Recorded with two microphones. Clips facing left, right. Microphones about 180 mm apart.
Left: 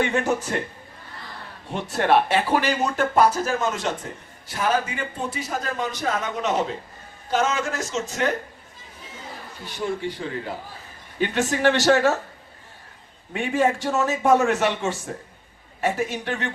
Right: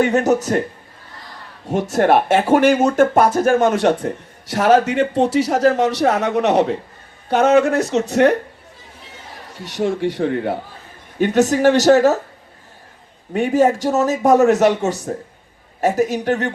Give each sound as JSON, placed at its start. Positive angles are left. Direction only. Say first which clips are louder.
{"t": 0.0, "sound": "a man's voice", "louder": "right 7 dB", "side_deg": -40}
{"t": 1.6, "sound": "a man's voice", "louder": "right 8 dB", "side_deg": -45}
{"t": 9.6, "sound": "a man's voice", "louder": "right 8 dB", "side_deg": -75}
{"t": 11.2, "sound": "a man's voice", "louder": "right 7 dB", "side_deg": -40}
{"t": 13.3, "sound": "a man's voice", "louder": "right 7 dB", "side_deg": -40}